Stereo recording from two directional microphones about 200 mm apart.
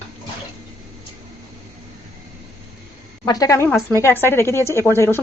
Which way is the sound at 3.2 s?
20° left (ahead or behind).